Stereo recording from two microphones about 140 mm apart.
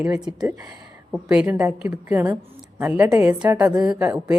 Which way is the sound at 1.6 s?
20° right (ahead or behind).